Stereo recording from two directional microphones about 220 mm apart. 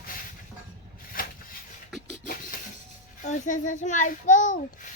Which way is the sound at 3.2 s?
35° left (ahead or behind).